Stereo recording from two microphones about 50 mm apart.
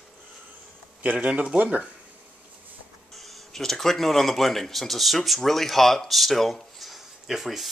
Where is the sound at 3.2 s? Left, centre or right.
Centre.